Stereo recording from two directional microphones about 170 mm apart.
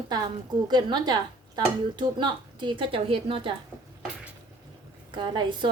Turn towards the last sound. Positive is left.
turn(degrees=-25)  # may be behind; listen again after turning